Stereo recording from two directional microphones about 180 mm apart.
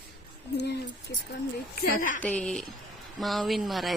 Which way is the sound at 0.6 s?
65° left (ahead or behind).